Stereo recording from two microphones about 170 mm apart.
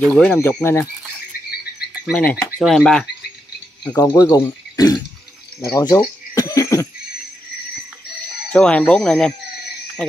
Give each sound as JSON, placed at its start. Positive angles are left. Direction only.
{"t": 0.0, "sound": "speech", "side_deg": 5}
{"t": 2.0, "sound": "frog", "side_deg": 5}
{"t": 3.8, "sound": "speech", "side_deg": 20}
{"t": 5.6, "sound": "cough", "side_deg": 20}
{"t": 8.5, "sound": "frog", "side_deg": 5}